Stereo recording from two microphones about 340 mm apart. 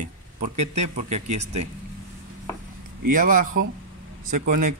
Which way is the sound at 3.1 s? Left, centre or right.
Right.